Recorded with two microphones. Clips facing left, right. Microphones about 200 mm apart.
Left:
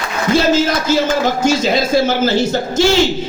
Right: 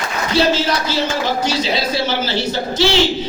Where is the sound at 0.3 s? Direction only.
45° left (ahead or behind).